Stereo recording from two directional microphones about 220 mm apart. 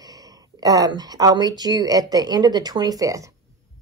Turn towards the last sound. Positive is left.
turn(degrees=-15)  # may be behind; listen again after turning